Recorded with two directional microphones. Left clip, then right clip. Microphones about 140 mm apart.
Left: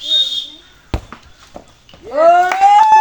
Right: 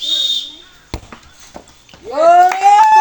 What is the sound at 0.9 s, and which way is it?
Walk, 30° right (ahead or behind).